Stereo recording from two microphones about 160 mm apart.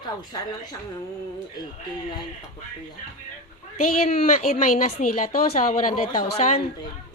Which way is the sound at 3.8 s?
50° left (ahead or behind).